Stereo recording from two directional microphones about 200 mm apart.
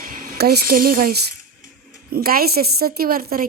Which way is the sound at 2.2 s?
50° right (ahead or behind).